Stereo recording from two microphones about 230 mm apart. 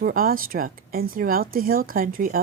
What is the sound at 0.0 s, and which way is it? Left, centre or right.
A woman's voice, right.